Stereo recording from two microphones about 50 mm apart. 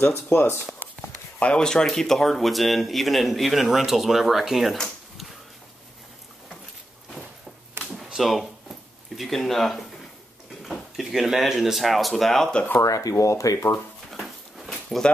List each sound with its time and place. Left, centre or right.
0.1 s speech: left
1.4 s speech: centre
7.9 s a sound: centre
11.0 s speech: centre
12.8 s speech: left